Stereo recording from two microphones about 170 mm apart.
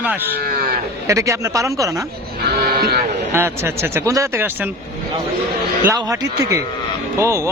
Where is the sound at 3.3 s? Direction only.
15° right (ahead or behind).